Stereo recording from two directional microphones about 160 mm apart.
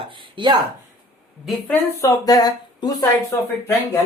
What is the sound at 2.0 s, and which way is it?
Speech, 20° left (ahead or behind).